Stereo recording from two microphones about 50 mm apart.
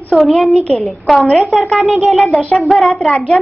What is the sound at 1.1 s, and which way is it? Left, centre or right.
Speech, centre.